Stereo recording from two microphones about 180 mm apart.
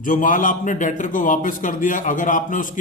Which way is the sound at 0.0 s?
45° left (ahead or behind).